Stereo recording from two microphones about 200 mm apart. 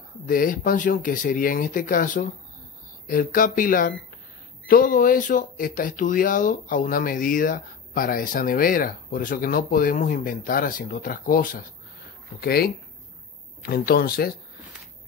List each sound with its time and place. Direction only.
0.3 s speech: 45° left (ahead or behind)